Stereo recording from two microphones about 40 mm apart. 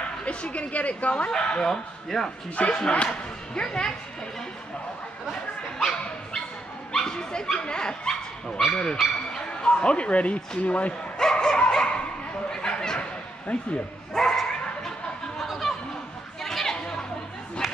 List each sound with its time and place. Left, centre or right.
0.2 s speech: left; by 2.3 s centre
2.5 s speech: left
3.5 s speech: left
5.8 s speech: centre; by 11.0 s left
11.1 s dog: centre
12.4 s a sound: centre
13.5 s speech: left
14.1 s dog: centre
16.4 s chatter: centre
17.6 s crowd: centre